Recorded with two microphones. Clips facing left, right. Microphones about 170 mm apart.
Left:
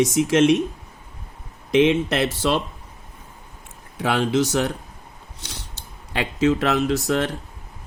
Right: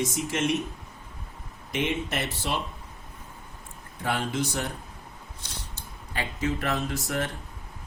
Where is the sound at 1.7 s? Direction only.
90° left.